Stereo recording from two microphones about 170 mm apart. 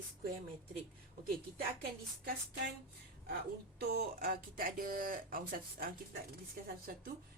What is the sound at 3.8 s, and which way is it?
Speech, 60° right (ahead or behind).